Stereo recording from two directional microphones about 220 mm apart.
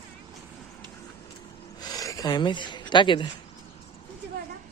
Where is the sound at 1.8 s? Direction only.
15° left (ahead or behind).